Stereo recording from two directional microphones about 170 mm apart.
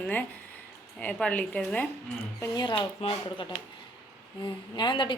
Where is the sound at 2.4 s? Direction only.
25° left (ahead or behind).